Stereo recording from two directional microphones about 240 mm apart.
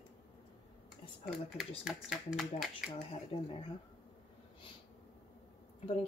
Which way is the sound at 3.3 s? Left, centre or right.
Left.